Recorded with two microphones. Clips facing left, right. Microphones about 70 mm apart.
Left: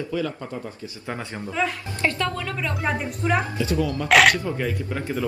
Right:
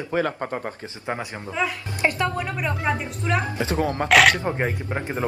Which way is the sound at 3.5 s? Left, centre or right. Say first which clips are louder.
Right 1 dB; right.